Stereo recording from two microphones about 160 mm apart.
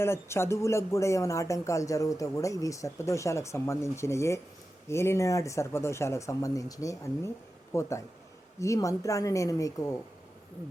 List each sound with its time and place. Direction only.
0.0 s speech: 15° left (ahead or behind)